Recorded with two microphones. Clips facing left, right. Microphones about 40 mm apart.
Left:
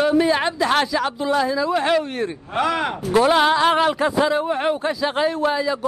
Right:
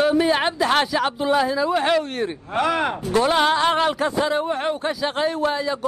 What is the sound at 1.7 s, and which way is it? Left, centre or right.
A man's voice, centre.